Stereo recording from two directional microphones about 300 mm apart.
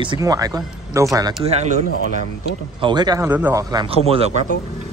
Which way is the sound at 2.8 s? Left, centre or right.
Centre.